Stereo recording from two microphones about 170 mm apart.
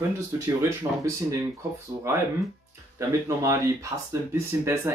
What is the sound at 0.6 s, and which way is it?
Speech, 15° right (ahead or behind).